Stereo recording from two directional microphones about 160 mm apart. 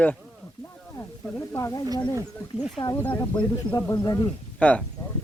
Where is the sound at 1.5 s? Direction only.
20° left (ahead or behind).